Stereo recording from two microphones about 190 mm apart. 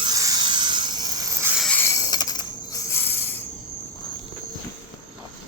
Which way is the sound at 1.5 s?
5° left (ahead or behind).